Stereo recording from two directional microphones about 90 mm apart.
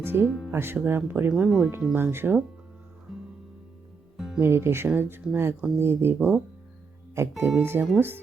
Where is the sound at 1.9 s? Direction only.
25° right (ahead or behind).